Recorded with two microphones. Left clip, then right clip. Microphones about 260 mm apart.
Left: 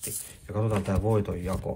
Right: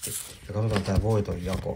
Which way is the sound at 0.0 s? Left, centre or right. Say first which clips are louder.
Right 2 dB; centre.